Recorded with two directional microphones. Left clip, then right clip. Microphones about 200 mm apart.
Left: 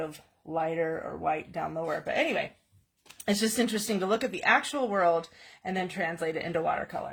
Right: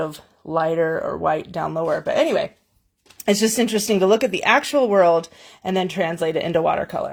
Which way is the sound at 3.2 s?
25° right (ahead or behind).